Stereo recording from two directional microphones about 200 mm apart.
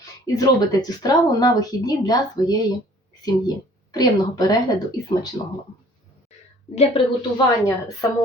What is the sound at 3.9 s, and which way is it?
Speech, 20° left (ahead or behind).